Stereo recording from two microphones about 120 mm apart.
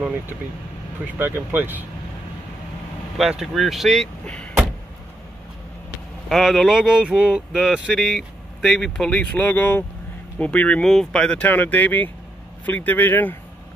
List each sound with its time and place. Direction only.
1.1 s speech: 15° right (ahead or behind)
3.2 s speech: centre (ahead or behind)
6.2 s speech: centre (ahead or behind)